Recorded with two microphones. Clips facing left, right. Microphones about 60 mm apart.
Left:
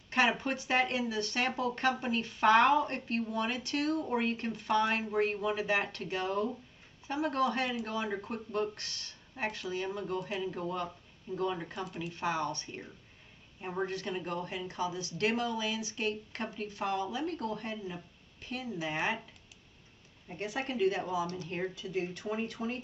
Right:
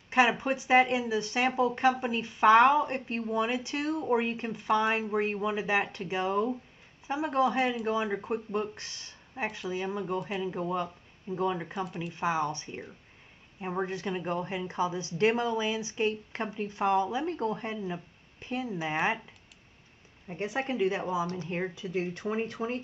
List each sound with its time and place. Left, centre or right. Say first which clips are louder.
0.1 s speech: right 4 dB; centre
10.1 s speech: right 3 dB; centre
10.4 s speech: right 4 dB; right
11.7 s speech: right 4 dB; centre
12.1 s speech: right 4 dB; centre
20.2 s speech: right 4 dB; right